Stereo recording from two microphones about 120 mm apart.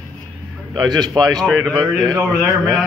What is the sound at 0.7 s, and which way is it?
Speech, 35° right (ahead or behind).